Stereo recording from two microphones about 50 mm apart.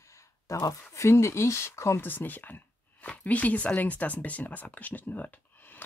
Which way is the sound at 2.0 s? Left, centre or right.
Left.